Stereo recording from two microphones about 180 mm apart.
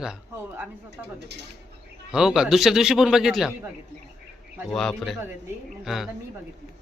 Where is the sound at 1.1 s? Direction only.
70° right (ahead or behind).